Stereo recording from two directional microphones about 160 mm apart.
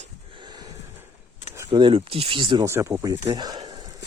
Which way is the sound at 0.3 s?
30° right (ahead or behind).